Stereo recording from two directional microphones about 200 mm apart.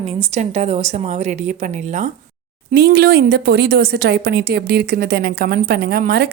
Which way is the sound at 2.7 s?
50° right (ahead or behind).